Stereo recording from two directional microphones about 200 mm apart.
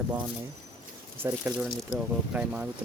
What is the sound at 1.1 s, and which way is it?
Speech, 10° right (ahead or behind).